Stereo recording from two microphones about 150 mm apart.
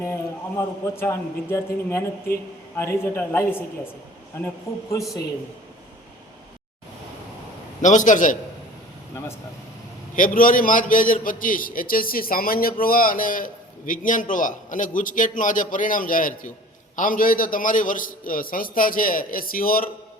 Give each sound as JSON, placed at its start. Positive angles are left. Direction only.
{"t": 0.0, "sound": "a man's voice", "side_deg": 20}
{"t": 7.8, "sound": "a man's voice", "side_deg": 55}
{"t": 10.2, "sound": "a man's voice", "side_deg": 65}